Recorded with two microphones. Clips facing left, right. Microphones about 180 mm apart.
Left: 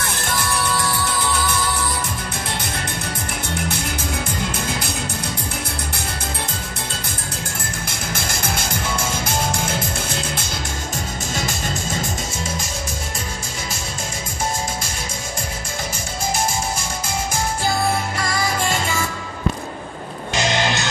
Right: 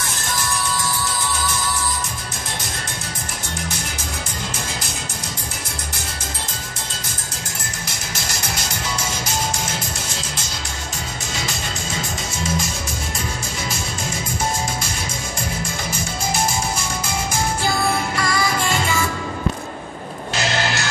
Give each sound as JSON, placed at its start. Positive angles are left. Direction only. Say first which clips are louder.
{"t": 8.1, "sound": "music", "louder": "left 4 dB", "side_deg": 50}
{"t": 11.3, "sound": "music", "louder": "left 3 dB", "side_deg": 50}
{"t": 18.1, "sound": "music", "louder": "right 1 dB", "side_deg": 45}
{"t": 20.3, "sound": "music", "louder": "left 2 dB", "side_deg": 20}